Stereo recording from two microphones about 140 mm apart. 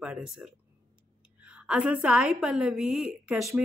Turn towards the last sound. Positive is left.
turn(degrees=0)  # may be behind; listen again after turning